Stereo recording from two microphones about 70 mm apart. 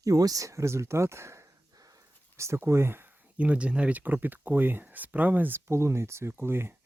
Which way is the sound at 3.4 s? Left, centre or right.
Centre.